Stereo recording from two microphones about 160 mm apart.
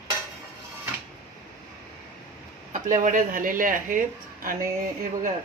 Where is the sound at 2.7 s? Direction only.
50° right (ahead or behind).